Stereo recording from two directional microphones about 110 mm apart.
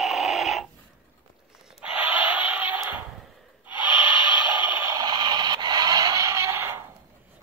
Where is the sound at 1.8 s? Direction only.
15° right (ahead or behind).